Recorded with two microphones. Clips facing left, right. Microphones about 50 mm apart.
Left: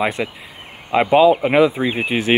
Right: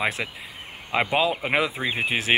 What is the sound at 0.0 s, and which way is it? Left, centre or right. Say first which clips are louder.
Speech: left 6 dB; centre.